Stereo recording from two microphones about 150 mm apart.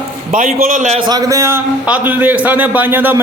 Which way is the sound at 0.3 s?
65° right (ahead or behind).